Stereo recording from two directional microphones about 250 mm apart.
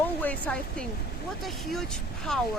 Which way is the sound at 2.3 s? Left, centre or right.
Centre.